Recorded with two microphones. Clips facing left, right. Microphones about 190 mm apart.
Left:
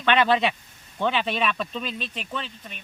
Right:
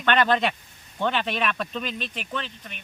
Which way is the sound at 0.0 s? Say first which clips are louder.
Left 1 dB; 5° left (ahead or behind).